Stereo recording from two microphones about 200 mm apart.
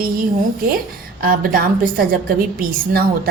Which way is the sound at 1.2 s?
45° right (ahead or behind).